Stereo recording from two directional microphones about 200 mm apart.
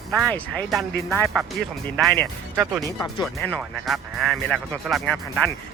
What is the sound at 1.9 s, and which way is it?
Speech, 5° left (ahead or behind).